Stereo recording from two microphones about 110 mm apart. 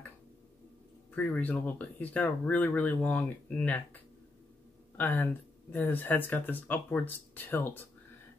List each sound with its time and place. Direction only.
1.1 s speech: 15° left (ahead or behind)
4.9 s speech: 15° left (ahead or behind)